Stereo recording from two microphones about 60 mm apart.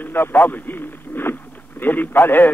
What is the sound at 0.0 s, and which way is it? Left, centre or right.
Radio, left.